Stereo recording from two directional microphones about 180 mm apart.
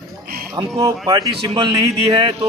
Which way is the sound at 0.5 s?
20° right (ahead or behind).